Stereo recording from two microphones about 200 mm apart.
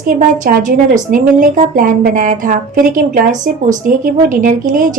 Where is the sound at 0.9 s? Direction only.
40° right (ahead or behind).